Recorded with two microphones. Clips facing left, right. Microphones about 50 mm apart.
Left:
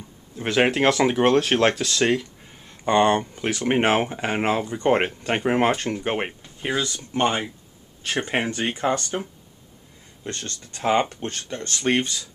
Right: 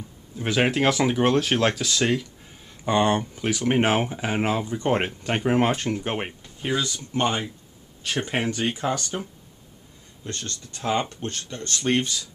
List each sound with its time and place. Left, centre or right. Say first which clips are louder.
0.6 s speech: left 3 dB; centre
10.2 s speech: left 1 dB; left